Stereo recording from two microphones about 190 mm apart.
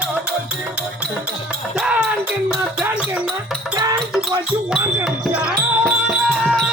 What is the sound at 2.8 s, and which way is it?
Speech, 5° right (ahead or behind).